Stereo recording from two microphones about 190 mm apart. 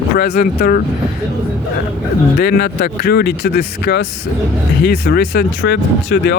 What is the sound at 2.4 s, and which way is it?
Speech, 55° left (ahead or behind).